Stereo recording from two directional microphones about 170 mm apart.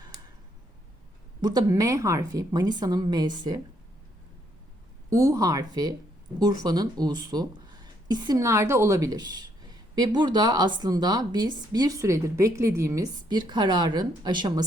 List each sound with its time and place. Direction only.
1.4 s speech: 25° right (ahead or behind)
5.1 s speech: 20° right (ahead or behind)